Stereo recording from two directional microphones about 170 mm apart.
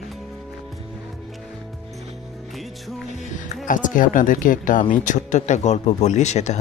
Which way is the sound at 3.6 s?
50° left (ahead or behind).